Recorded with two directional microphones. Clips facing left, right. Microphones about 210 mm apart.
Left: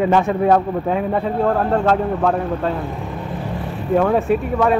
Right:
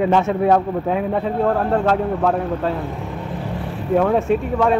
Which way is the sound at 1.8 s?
5° right (ahead or behind).